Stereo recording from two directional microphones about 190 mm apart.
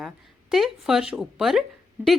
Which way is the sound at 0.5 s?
Centre (ahead or behind).